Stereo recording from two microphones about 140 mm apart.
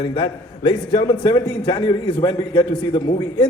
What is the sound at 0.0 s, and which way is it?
A man's voice, 35° left (ahead or behind).